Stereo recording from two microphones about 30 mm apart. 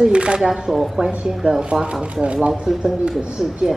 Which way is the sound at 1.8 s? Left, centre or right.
Right.